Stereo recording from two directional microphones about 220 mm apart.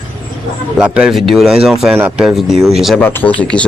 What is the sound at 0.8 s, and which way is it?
Speech, 5° right (ahead or behind).